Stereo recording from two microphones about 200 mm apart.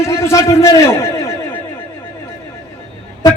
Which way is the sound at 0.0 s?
15° left (ahead or behind).